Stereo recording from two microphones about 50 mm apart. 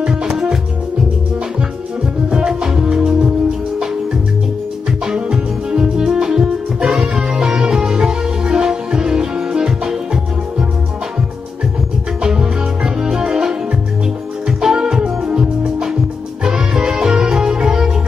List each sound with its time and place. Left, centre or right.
0.0 s music: centre
2.2 s music: centre
5.0 s music: centre
12.2 s music: centre
14.6 s music: centre